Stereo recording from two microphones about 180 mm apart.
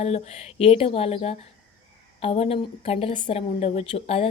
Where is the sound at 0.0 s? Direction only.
35° left (ahead or behind).